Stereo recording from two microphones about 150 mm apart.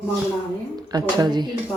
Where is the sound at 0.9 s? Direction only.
30° right (ahead or behind).